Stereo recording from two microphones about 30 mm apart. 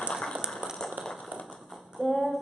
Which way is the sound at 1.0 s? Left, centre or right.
Right.